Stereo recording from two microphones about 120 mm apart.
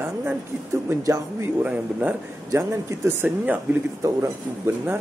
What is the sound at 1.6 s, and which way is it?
Speech, 10° right (ahead or behind).